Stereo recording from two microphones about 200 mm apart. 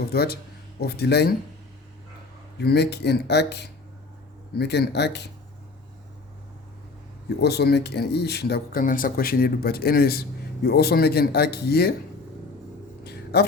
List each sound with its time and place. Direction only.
0.1 s speech: 50° left (ahead or behind)
2.6 s speech: 55° left (ahead or behind)
7.4 s speech: 55° left (ahead or behind)
13.3 s speech: 55° left (ahead or behind)